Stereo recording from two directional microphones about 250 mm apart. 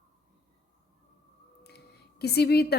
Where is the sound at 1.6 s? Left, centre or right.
Left.